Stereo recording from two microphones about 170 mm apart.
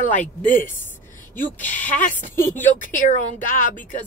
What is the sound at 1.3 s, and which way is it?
Speech, 50° left (ahead or behind).